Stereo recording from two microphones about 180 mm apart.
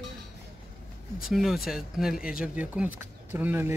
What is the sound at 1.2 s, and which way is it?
Speech, centre (ahead or behind).